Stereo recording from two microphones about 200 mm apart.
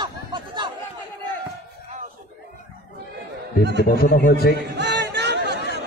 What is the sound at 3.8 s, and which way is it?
Speech, 45° left (ahead or behind).